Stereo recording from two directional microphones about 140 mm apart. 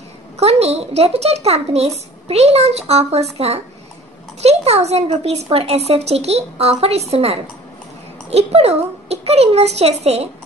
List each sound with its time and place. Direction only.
0.4 s a child's voice: 50° right (ahead or behind)